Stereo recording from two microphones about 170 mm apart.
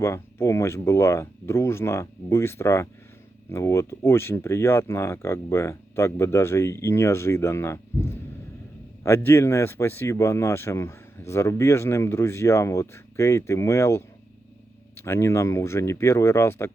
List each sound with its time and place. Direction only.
0.0 s speech: 15° left (ahead or behind)